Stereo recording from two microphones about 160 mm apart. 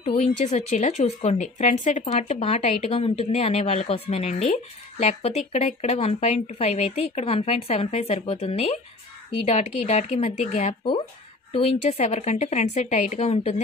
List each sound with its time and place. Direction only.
0.0 s speech: 45° left (ahead or behind)